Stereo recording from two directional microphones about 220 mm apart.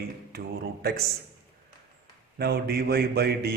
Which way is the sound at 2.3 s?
45° right (ahead or behind).